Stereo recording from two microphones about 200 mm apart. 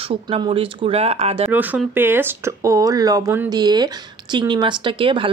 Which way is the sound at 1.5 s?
10° right (ahead or behind).